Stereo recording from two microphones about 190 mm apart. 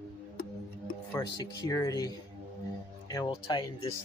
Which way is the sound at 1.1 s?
20° left (ahead or behind).